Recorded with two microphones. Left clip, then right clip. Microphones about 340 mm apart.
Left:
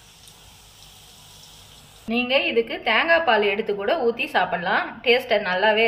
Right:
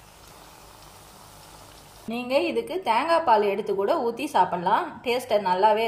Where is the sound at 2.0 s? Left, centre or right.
Right.